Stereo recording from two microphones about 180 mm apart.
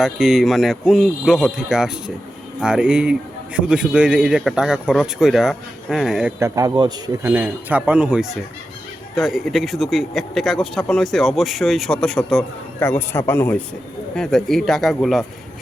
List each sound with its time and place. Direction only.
0.0 s speech: centre (ahead or behind)
6.4 s speech: 20° right (ahead or behind)
7.3 s speech: 10° right (ahead or behind)